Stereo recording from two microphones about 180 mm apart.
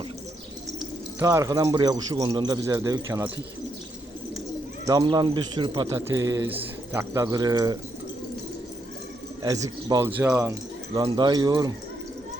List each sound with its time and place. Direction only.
1.2 s a man's voice: 15° right (ahead or behind)
4.9 s a man's voice: 20° right (ahead or behind)
9.4 s a man's voice: 20° right (ahead or behind)